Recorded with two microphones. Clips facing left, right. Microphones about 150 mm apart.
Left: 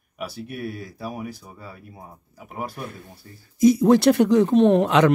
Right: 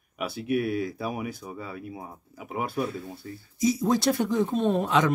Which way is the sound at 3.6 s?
60° left (ahead or behind).